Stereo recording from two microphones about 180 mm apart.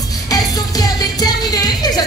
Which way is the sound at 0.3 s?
20° left (ahead or behind).